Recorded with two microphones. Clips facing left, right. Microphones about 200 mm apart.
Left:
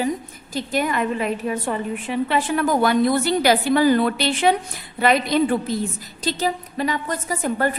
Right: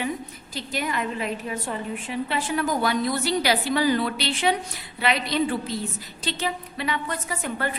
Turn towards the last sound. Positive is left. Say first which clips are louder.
# left 7 dB
turn(degrees=40)  # may be behind; listen again after turning